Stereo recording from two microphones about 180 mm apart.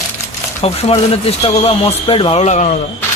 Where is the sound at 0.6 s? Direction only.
35° left (ahead or behind).